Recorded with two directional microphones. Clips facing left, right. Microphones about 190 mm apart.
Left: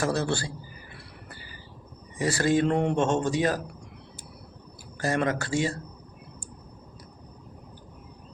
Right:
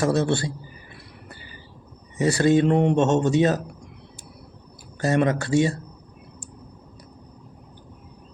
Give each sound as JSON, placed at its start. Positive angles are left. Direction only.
{"t": 0.0, "sound": "a man's voice", "side_deg": -25}
{"t": 2.1, "sound": "a man's voice", "side_deg": -20}
{"t": 4.9, "sound": "a man's voice", "side_deg": -20}